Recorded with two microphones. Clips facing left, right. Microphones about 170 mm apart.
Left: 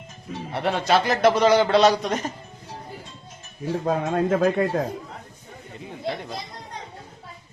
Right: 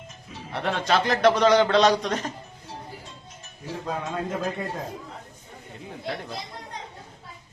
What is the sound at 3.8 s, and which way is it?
Speech, 55° left (ahead or behind).